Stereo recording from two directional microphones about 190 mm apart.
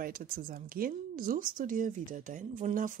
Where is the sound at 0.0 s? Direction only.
50° right (ahead or behind).